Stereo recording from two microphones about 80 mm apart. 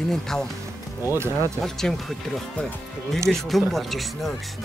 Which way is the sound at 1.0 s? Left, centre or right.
Right.